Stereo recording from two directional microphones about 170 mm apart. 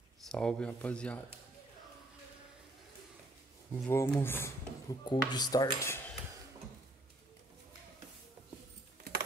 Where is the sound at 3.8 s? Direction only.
10° left (ahead or behind).